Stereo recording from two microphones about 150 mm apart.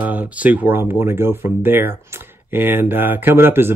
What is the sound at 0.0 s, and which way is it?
Speech, 10° right (ahead or behind).